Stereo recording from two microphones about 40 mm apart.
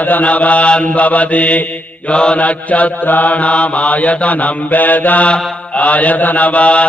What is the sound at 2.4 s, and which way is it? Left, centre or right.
Mantra, left.